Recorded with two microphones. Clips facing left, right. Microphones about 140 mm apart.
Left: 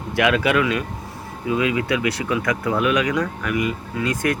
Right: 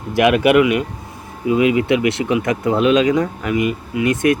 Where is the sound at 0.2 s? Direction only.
20° right (ahead or behind).